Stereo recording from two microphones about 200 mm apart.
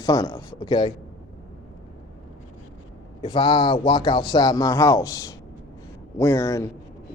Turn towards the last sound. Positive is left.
turn(degrees=15)  # may be behind; listen again after turning